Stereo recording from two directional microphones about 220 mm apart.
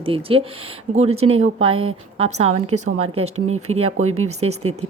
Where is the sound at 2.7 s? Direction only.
90° right.